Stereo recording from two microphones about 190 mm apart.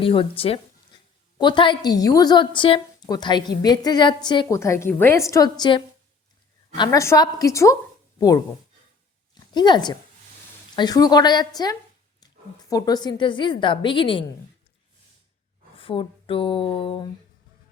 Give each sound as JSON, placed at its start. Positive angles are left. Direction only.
{"t": 0.0, "sound": "a woman's voice", "side_deg": 30}
{"t": 9.3, "sound": "a woman's voice", "side_deg": 20}
{"t": 15.7, "sound": "speech", "side_deg": 30}